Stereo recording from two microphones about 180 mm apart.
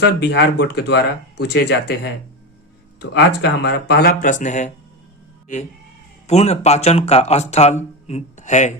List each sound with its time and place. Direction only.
0.0 s speech: 65° left (ahead or behind)
3.0 s speech: 70° left (ahead or behind); by 4.7 s 40° left (ahead or behind)
6.2 s speech: 35° left (ahead or behind)